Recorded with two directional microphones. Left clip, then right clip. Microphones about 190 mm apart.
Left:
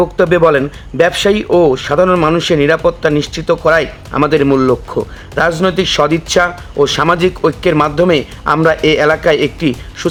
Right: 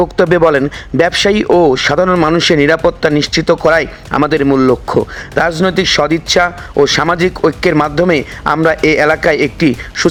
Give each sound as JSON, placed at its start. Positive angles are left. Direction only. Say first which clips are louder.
{"t": 0.0, "sound": "speech", "louder": "even", "side_deg": -30}